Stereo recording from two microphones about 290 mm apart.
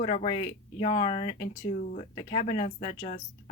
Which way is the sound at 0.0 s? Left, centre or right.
Left.